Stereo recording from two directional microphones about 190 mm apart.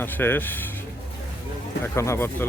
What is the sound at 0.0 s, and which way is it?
Speech, 10° left (ahead or behind).